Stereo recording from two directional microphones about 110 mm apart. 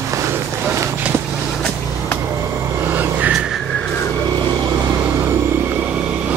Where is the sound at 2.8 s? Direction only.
15° right (ahead or behind).